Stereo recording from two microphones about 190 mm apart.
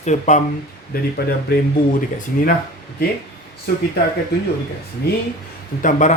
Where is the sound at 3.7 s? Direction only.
55° left (ahead or behind).